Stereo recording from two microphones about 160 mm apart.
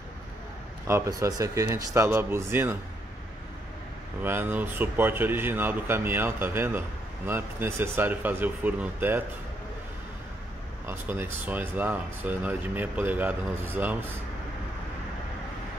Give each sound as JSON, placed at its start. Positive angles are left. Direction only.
{"t": 0.8, "sound": "speech", "side_deg": -15}
{"t": 4.2, "sound": "speech", "side_deg": -15}
{"t": 10.9, "sound": "speech", "side_deg": -15}